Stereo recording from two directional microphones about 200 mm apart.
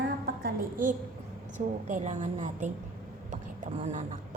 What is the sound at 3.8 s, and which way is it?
Speech, 35° right (ahead or behind).